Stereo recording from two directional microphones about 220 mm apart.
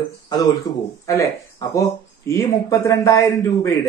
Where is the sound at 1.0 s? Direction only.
15° left (ahead or behind).